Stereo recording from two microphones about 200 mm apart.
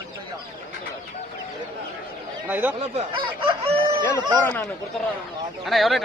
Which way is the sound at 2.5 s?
10° right (ahead or behind).